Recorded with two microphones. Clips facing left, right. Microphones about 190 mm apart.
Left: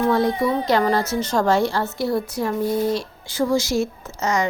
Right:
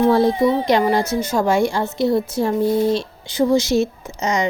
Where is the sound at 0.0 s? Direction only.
25° right (ahead or behind).